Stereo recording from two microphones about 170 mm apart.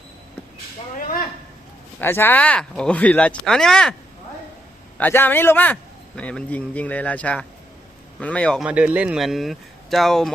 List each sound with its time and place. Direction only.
0.9 s a sound: 60° left (ahead or behind)
2.0 s speech: 10° left (ahead or behind)
4.9 s speech: 10° left (ahead or behind)
8.6 s speech: 5° right (ahead or behind)